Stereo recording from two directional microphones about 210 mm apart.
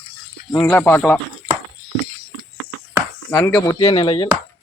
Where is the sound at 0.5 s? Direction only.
15° left (ahead or behind).